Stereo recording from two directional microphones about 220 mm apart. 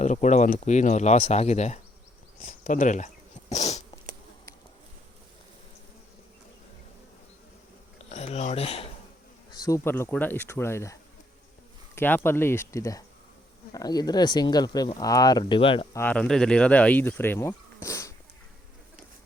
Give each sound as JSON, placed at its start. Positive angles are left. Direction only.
{"t": 0.0, "sound": "speech", "side_deg": 30}
{"t": 7.9, "sound": "a sound", "side_deg": 30}
{"t": 9.5, "sound": "speech", "side_deg": 15}
{"t": 11.9, "sound": "speech", "side_deg": 10}
{"t": 16.0, "sound": "speech", "side_deg": 5}